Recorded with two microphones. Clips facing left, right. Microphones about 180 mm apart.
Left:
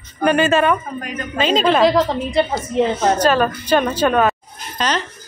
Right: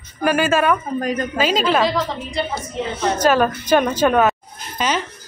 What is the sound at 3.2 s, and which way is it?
Speech, 10° right (ahead or behind).